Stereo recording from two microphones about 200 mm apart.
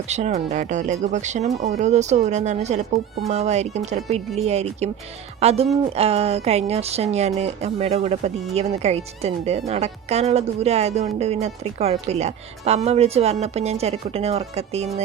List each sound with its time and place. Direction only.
0.1 s speech: 35° right (ahead or behind)